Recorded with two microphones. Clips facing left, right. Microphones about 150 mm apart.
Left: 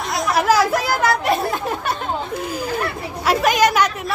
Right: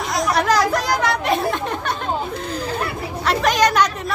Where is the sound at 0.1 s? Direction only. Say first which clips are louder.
Left 1 dB; 5° left (ahead or behind).